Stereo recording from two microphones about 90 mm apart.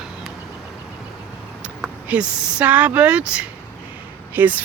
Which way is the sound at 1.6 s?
15° right (ahead or behind).